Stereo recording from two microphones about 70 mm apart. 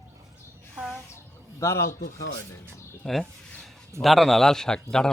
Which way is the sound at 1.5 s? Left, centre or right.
Left.